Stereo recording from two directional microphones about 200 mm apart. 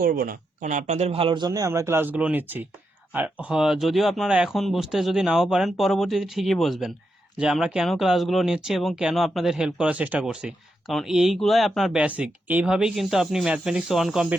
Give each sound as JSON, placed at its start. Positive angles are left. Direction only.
{"t": 0.0, "sound": "speech", "side_deg": -45}